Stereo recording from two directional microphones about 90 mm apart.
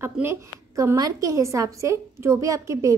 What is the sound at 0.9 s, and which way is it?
A woman's voice, 40° right (ahead or behind).